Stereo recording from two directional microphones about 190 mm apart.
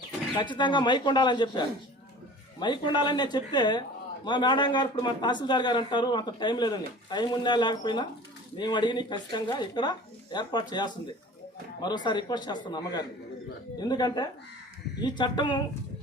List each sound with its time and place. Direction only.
0.3 s a man's voice: 25° left (ahead or behind)